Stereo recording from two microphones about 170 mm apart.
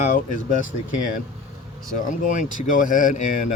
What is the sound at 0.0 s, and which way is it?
Speech, 50° left (ahead or behind).